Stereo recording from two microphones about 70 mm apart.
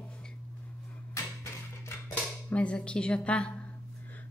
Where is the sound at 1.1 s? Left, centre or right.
Left.